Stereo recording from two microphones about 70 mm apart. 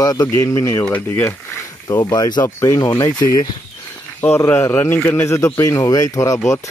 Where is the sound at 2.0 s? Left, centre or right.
Left.